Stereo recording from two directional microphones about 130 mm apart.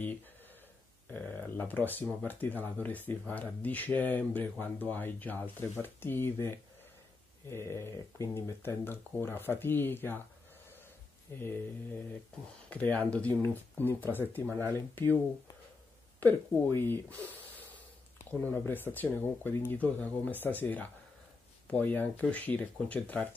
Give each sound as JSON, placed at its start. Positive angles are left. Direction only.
{"t": 1.1, "sound": "speech", "side_deg": 15}
{"t": 11.3, "sound": "speech", "side_deg": 15}
{"t": 12.6, "sound": "speech", "side_deg": 10}
{"t": 16.2, "sound": "speech", "side_deg": 15}